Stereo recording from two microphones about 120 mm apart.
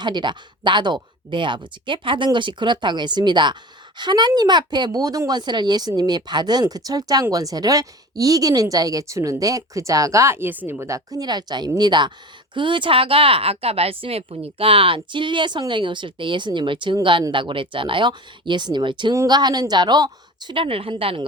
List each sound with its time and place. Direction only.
0.0 s speech: 40° right (ahead or behind)
19.1 s speech: 30° right (ahead or behind); by 21.2 s 45° right (ahead or behind)